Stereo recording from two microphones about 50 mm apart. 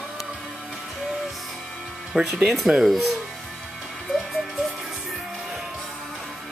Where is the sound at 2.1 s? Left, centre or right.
Centre.